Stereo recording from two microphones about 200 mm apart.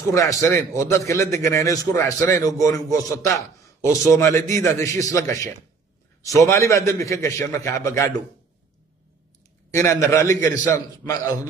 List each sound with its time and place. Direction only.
0.1 s a man's voice: 15° left (ahead or behind)
9.8 s a man's voice: 15° left (ahead or behind)